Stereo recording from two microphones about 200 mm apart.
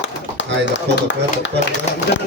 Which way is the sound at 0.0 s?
65° left (ahead or behind).